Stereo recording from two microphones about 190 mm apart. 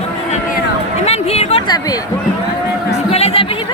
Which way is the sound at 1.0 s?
35° left (ahead or behind).